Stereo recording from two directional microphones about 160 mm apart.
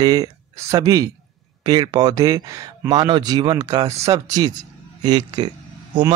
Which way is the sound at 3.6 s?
40° right (ahead or behind).